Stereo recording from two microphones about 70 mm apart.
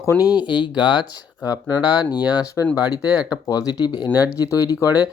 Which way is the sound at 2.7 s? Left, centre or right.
Left.